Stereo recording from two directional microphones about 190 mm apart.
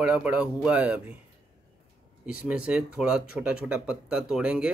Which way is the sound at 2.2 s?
5° right (ahead or behind).